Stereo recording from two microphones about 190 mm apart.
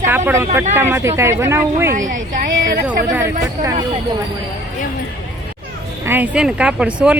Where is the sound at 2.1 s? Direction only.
45° right (ahead or behind).